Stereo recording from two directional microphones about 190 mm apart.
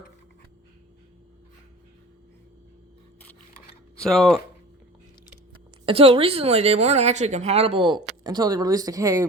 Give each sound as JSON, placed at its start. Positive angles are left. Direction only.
{"t": 4.0, "sound": "speech", "side_deg": 0}
{"t": 5.8, "sound": "a woman's voice", "side_deg": -30}